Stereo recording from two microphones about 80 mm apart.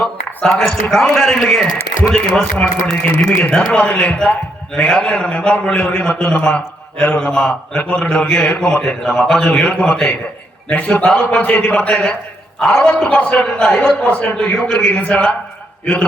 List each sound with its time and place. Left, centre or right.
0.0 s a man's voice: centre
10.7 s a man's voice: centre